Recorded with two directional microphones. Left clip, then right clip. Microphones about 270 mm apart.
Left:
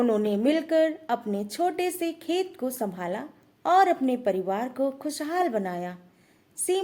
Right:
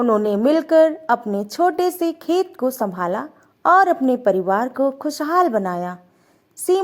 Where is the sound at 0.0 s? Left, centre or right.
Centre.